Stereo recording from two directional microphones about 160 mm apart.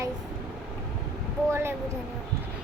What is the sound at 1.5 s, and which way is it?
Speech, 15° right (ahead or behind).